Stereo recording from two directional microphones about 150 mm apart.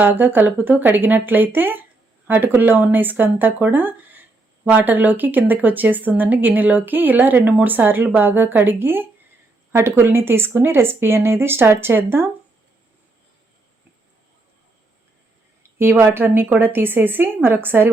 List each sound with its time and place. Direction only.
0.0 s speech: 15° right (ahead or behind)
15.8 s speech: 15° right (ahead or behind)